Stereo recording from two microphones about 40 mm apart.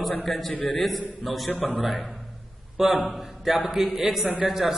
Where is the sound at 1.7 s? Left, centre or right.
Right.